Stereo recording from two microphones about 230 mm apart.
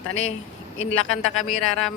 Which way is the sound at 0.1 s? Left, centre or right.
Left.